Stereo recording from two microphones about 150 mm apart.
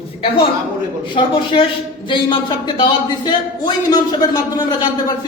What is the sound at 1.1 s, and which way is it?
A woman's voice, 35° left (ahead or behind).